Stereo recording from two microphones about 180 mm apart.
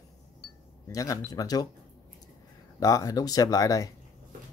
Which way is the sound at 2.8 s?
20° left (ahead or behind).